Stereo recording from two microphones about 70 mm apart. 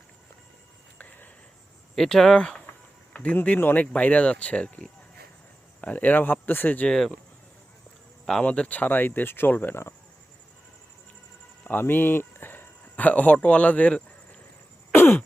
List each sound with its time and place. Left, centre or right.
0.9 s a sound: left
2.0 s speech: centre
3.1 s a sound: centre
3.6 s speech: left
6.8 s speech: centre
8.3 s speech: centre; by 9.9 s left
11.6 s speech: left
14.9 s throat clearing: left